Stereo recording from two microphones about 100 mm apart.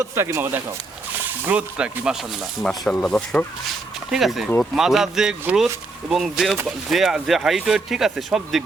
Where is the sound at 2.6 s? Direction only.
5° left (ahead or behind).